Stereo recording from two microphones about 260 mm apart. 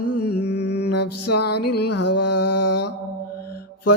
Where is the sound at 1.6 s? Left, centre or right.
Left.